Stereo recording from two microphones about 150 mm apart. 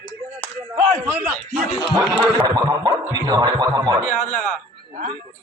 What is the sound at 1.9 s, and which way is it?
Speech, 30° right (ahead or behind).